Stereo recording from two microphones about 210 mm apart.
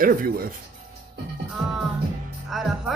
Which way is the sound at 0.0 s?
45° right (ahead or behind).